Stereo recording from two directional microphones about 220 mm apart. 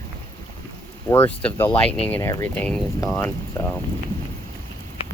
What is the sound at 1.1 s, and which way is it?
Speech, 10° left (ahead or behind).